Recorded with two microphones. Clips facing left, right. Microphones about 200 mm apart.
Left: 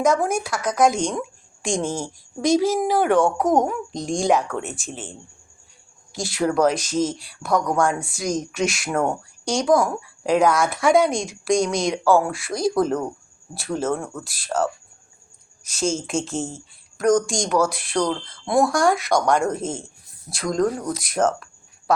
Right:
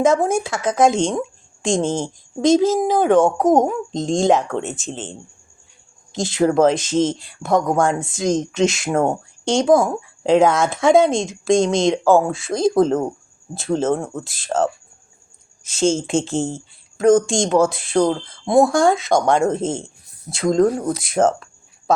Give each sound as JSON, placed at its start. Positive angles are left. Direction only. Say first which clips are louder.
{"t": 0.0, "sound": "speech", "louder": "right 4 dB", "side_deg": -25}
{"t": 6.1, "sound": "speech", "louder": "right 5 dB", "side_deg": -20}